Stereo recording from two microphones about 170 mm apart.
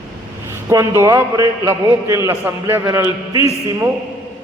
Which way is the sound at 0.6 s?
15° right (ahead or behind).